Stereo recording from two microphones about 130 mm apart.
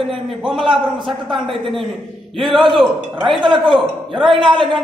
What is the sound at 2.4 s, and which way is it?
Speech, centre (ahead or behind).